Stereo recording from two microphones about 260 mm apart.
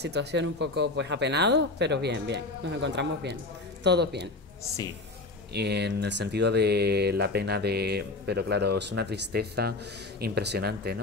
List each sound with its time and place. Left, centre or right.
0.0 s speech: right
5.5 s speech: right